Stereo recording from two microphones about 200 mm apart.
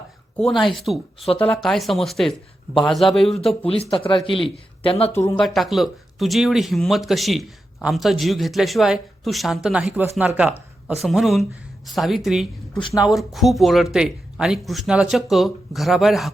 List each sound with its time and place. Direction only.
0.3 s speech: centre (ahead or behind)
3.8 s speech: 25° left (ahead or behind)
5.4 s speech: centre (ahead or behind)